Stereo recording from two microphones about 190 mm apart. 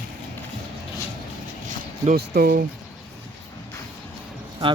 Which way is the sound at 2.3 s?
45° right (ahead or behind).